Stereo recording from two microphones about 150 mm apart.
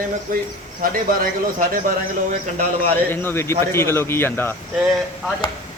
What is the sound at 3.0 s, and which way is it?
Speech, 15° left (ahead or behind).